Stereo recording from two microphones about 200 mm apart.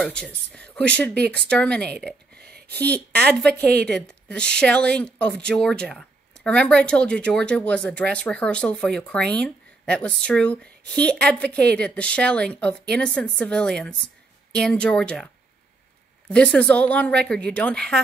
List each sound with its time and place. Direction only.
0.0 s speech: 5° left (ahead or behind)
2.3 s a sound: 50° right (ahead or behind)
2.7 s speech: 5° left (ahead or behind)
16.3 s speech: 5° left (ahead or behind)